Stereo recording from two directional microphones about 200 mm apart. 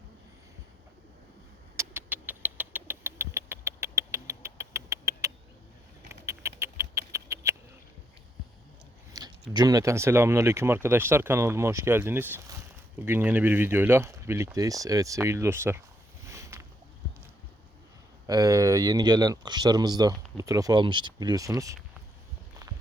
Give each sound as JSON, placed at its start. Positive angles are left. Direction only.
{"t": 1.7, "sound": "rodents", "side_deg": -15}
{"t": 9.1, "sound": "speech", "side_deg": -20}
{"t": 16.2, "sound": "a sound", "side_deg": -15}
{"t": 18.3, "sound": "speech", "side_deg": -15}